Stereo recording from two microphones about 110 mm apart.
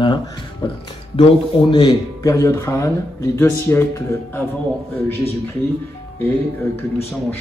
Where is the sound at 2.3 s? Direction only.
25° left (ahead or behind).